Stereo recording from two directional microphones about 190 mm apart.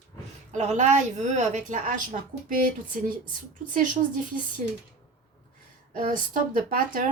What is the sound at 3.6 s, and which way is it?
Speech, 45° right (ahead or behind).